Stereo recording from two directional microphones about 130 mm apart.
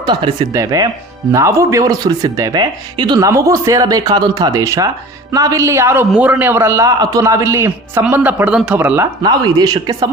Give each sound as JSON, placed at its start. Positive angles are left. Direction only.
{"t": 0.1, "sound": "speech", "side_deg": -35}
{"t": 0.5, "sound": "speech", "side_deg": -25}
{"t": 9.2, "sound": "speech", "side_deg": -30}